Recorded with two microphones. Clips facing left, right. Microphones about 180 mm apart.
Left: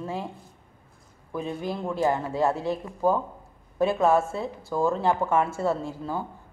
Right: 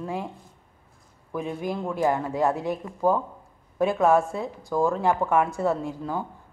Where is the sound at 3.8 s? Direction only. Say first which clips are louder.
Right 1 dB; 15° right (ahead or behind).